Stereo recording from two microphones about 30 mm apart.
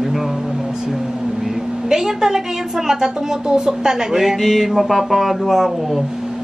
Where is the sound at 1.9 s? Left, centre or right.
Centre.